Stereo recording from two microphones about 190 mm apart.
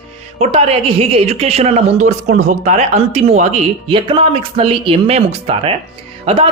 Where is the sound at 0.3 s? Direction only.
30° right (ahead or behind).